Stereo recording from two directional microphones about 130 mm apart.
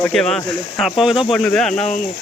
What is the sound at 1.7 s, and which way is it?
Speech, 65° left (ahead or behind).